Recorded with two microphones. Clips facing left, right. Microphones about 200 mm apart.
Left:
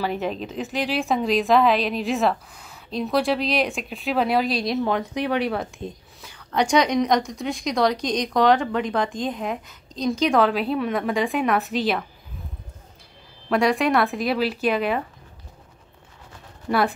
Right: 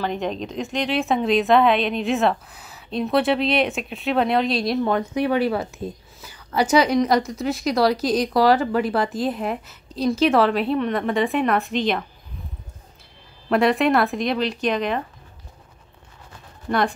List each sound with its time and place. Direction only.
0.0 s a woman's voice: 5° left (ahead or behind)
13.5 s a woman's voice: centre (ahead or behind)
16.6 s speech: 5° left (ahead or behind)